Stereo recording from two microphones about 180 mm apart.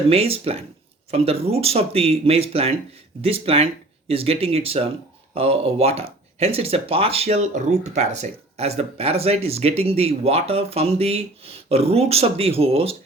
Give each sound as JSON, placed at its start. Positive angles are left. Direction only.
{"t": 0.1, "sound": "speech", "side_deg": -35}